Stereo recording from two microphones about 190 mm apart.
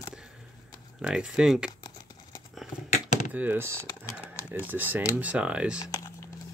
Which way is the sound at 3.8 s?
15° left (ahead or behind).